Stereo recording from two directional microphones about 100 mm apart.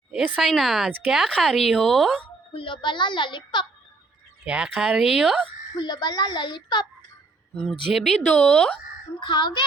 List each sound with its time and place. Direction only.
0.3 s speech: centre (ahead or behind)
2.5 s a woman's voice: 60° left (ahead or behind)
4.4 s speech: 10° right (ahead or behind)
5.7 s a woman's voice: 45° left (ahead or behind)
7.7 s speech: centre (ahead or behind)
9.2 s a woman's voice: 50° left (ahead or behind)